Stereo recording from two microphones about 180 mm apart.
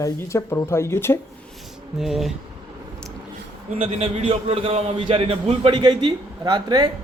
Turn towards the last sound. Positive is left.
turn(degrees=-25)  # may be behind; listen again after turning